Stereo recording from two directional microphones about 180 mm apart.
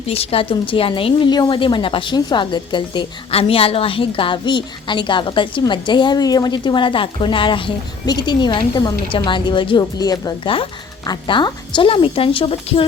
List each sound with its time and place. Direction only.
0.1 s a woman's voice: 35° left (ahead or behind)